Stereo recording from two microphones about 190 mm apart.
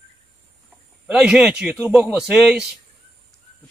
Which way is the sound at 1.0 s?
5° right (ahead or behind).